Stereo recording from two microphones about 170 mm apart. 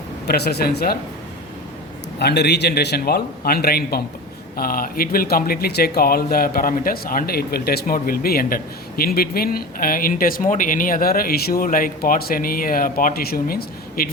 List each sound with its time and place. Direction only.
0.3 s a man's voice: 70° left (ahead or behind)
2.1 s a man's voice: 75° left (ahead or behind)